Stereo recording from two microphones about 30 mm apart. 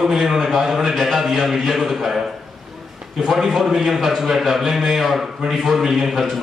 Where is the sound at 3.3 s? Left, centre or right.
Centre.